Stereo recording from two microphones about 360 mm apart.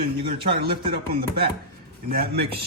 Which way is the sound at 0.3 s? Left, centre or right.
Centre.